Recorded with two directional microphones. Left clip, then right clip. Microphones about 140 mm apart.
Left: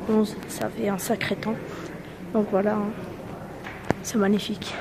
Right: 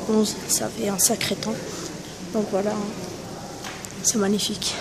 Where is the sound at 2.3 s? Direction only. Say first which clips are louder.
Left 1 dB; 15° left (ahead or behind).